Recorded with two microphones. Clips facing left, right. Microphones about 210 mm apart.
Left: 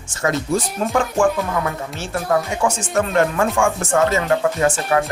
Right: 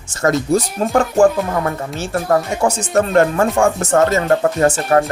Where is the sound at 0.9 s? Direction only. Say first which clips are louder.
Right 5 dB; 40° right (ahead or behind).